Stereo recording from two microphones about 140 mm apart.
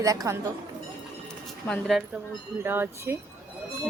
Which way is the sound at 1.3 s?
5° left (ahead or behind).